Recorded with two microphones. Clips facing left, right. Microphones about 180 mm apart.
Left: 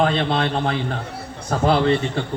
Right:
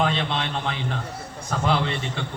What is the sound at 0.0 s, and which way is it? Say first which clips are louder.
A man's voice: left 5 dB; 40° left (ahead or behind).